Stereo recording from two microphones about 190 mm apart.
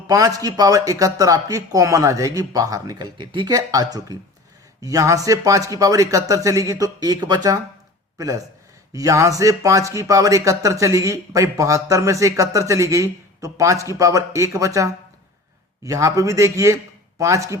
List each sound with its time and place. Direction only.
0.1 s speech: 20° right (ahead or behind)
8.9 s speech: 15° right (ahead or behind)